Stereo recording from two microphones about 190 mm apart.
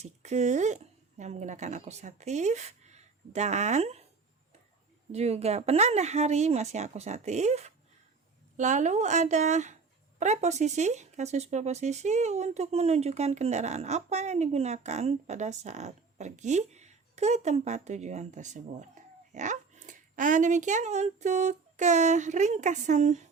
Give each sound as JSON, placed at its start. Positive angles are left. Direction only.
{"t": 0.0, "sound": "a woman's voice", "side_deg": -35}
{"t": 5.1, "sound": "speech", "side_deg": -35}